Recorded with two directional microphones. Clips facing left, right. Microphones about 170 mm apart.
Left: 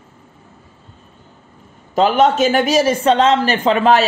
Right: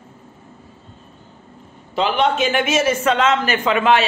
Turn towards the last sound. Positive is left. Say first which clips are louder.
# left 3 dB
turn(degrees=35)  # may be behind; listen again after turning